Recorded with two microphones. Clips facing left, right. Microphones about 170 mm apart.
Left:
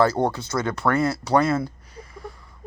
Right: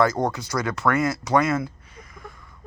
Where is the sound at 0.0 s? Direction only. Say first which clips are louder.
Left 1 dB; 30° left (ahead or behind).